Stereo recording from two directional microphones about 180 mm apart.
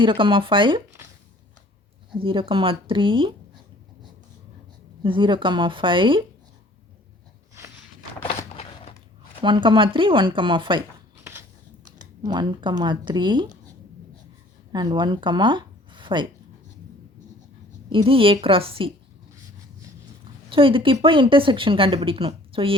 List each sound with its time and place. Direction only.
0.0 s speech: 25° right (ahead or behind)
2.1 s speech: 30° right (ahead or behind)
5.0 s speech: 25° right (ahead or behind)
9.4 s speech: 25° right (ahead or behind)
11.2 s a sound: 15° right (ahead or behind)
12.2 s speech: 25° right (ahead or behind)
14.7 s speech: 25° right (ahead or behind)
17.8 s speech: 30° right (ahead or behind)
20.5 s speech: 30° right (ahead or behind)